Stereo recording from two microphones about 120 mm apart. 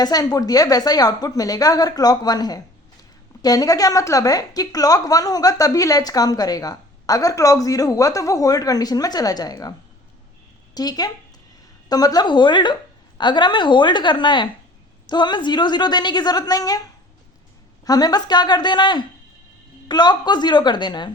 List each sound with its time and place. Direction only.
0.0 s a woman's voice: 30° left (ahead or behind)
10.8 s a woman's voice: 35° left (ahead or behind)